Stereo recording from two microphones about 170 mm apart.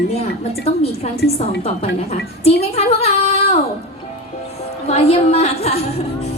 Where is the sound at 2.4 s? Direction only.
35° left (ahead or behind).